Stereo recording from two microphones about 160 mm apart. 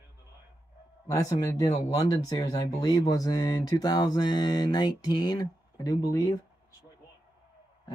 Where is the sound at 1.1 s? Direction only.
20° left (ahead or behind).